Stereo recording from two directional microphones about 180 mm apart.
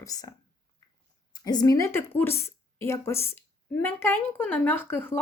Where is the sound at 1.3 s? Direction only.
20° left (ahead or behind).